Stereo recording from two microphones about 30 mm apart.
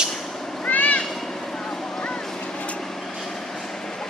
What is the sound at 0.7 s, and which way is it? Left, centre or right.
Cat, left.